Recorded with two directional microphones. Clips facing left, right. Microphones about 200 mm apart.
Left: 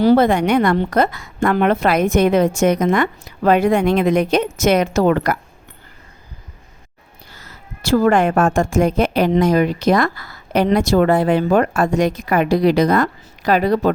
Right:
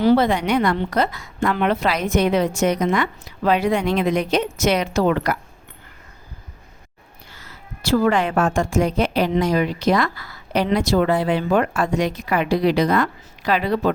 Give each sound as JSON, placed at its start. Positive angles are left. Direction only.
{"t": 0.2, "sound": "a woman's voice", "side_deg": 50}
{"t": 7.3, "sound": "a woman's voice", "side_deg": 40}